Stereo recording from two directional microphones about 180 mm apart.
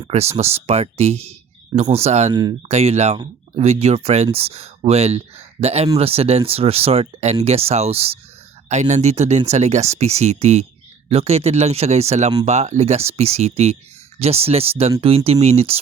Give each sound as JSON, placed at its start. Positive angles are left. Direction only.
{"t": 0.1, "sound": "speech", "side_deg": -35}
{"t": 2.3, "sound": "speech", "side_deg": -20}
{"t": 2.6, "sound": "speech", "side_deg": -35}